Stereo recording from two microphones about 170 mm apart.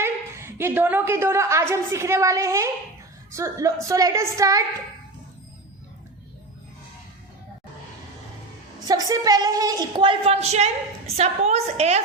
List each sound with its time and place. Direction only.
0.0 s a woman's voice: 15° right (ahead or behind)
8.8 s a woman's voice: 20° right (ahead or behind); by 12.0 s 40° right (ahead or behind)